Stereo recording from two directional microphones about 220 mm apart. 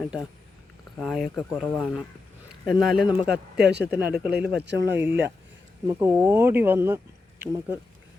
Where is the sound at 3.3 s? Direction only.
50° right (ahead or behind).